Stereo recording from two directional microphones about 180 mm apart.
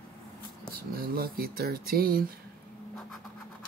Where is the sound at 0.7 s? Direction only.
55° right (ahead or behind).